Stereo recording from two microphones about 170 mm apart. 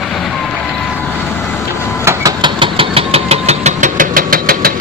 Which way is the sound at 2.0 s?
25° right (ahead or behind).